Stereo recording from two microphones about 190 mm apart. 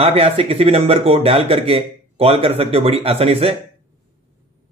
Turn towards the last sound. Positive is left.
turn(degrees=-30)  # may be behind; listen again after turning